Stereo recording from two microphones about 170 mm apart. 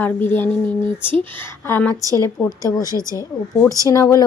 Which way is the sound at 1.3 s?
10° left (ahead or behind).